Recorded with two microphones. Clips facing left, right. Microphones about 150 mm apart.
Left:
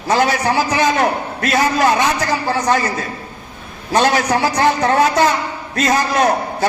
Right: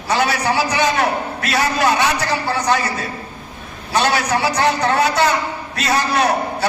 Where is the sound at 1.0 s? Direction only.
45° left (ahead or behind).